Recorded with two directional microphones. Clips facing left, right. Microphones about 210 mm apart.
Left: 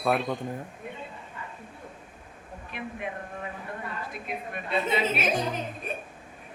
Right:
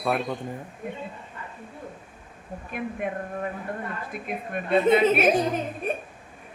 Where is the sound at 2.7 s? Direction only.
50° right (ahead or behind).